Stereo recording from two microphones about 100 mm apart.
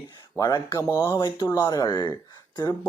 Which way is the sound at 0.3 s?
40° left (ahead or behind).